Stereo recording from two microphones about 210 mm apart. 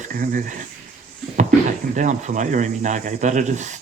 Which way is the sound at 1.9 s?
35° right (ahead or behind).